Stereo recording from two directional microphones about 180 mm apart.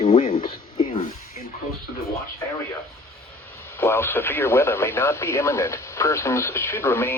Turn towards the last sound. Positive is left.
turn(degrees=15)  # may be behind; listen again after turning